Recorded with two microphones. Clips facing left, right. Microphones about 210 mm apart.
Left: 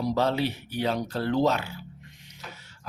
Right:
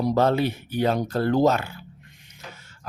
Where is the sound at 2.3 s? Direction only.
50° right (ahead or behind).